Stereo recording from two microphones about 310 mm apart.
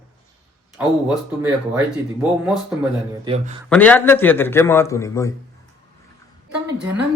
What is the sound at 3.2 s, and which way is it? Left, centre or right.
Speech, centre.